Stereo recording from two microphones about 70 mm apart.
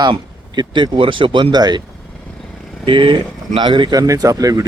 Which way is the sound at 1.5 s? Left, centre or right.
Right.